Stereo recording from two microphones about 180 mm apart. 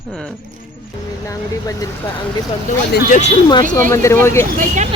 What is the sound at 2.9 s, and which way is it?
Speech, 45° left (ahead or behind).